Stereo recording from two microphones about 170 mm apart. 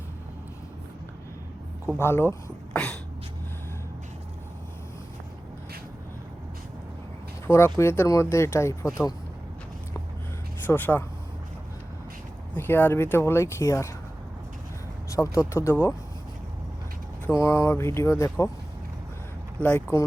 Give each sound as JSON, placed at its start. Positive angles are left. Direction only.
{"t": 2.0, "sound": "speech", "side_deg": 15}
{"t": 2.7, "sound": "a sound", "side_deg": 5}
{"t": 7.4, "sound": "speech", "side_deg": 15}
{"t": 10.7, "sound": "speech", "side_deg": 10}
{"t": 12.5, "sound": "speech", "side_deg": 10}
{"t": 15.1, "sound": "speech", "side_deg": 20}
{"t": 17.2, "sound": "speech", "side_deg": 15}
{"t": 19.5, "sound": "speech", "side_deg": 10}